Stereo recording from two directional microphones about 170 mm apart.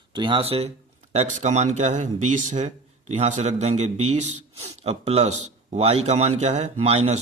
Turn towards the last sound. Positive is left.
turn(degrees=-40)  # may be behind; listen again after turning